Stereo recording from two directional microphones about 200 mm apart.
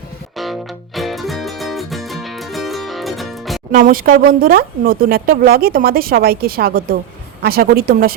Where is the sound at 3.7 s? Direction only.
45° right (ahead or behind).